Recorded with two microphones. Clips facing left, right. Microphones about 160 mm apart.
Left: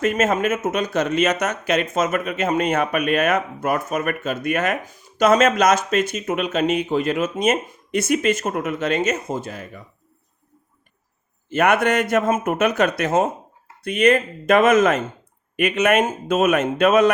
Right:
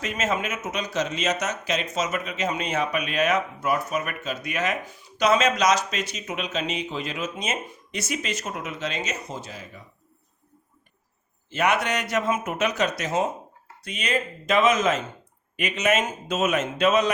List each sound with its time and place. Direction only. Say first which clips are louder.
0.0 s speech: left 8 dB; 50° left (ahead or behind)
11.4 s a man's voice: left 6 dB; 55° left (ahead or behind)